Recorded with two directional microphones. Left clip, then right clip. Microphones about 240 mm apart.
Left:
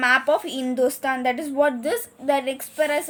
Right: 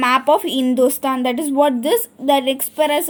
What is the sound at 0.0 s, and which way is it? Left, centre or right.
A woman's voice, right.